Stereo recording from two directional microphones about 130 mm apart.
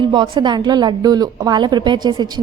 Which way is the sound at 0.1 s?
35° right (ahead or behind).